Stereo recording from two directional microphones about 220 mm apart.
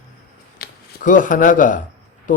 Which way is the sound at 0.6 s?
35° left (ahead or behind).